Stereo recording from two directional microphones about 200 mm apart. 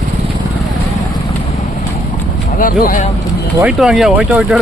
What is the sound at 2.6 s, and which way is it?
Speech, 45° left (ahead or behind).